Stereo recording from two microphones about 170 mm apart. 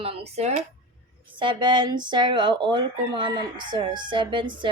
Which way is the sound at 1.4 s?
25° right (ahead or behind).